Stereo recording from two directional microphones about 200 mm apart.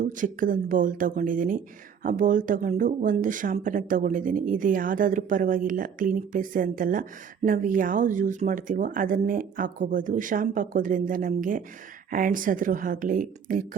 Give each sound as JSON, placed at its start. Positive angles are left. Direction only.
{"t": 0.0, "sound": "speech", "side_deg": -40}